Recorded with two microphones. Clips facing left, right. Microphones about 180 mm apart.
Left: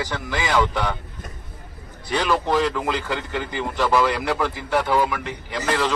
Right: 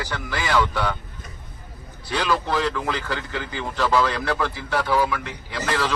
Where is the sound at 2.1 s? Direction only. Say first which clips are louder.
Left 2 dB; 15° left (ahead or behind).